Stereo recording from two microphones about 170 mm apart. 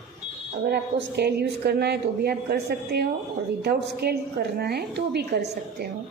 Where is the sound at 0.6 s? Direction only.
80° right.